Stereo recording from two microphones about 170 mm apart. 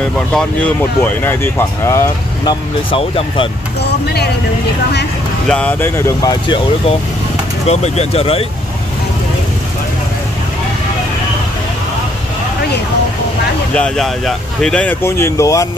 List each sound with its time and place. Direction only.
0.3 s speech: 5° left (ahead or behind)
2.9 s speech: 35° left (ahead or behind)
3.8 s speech: 70° left (ahead or behind)
5.5 s speech: 10° left (ahead or behind)
7.6 s speech: 40° left (ahead or behind)
13.7 s speech: 5° left (ahead or behind); by 15.7 s 20° left (ahead or behind)